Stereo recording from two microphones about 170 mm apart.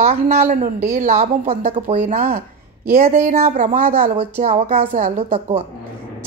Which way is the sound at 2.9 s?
55° right (ahead or behind).